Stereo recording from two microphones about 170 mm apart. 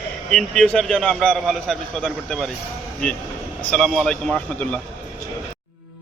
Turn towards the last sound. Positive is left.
turn(degrees=5)  # may be behind; listen again after turning